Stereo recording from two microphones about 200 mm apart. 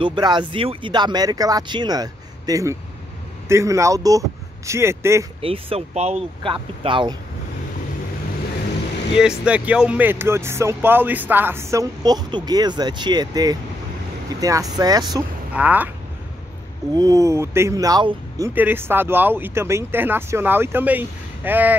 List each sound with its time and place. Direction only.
0.0 s speech: 20° right (ahead or behind)
5.4 s speech: 30° right (ahead or behind)
9.4 s speech: 5° right (ahead or behind)
15.5 s speech: 10° right (ahead or behind)
16.9 s speech: 15° right (ahead or behind)